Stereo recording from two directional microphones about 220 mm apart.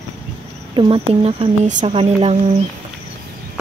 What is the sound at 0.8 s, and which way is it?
Speech, 20° right (ahead or behind).